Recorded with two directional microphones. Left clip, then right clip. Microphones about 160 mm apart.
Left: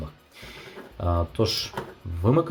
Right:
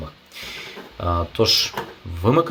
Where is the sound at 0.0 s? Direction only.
Centre (ahead or behind).